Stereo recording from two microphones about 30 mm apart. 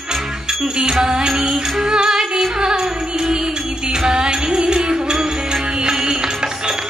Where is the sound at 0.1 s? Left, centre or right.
Centre.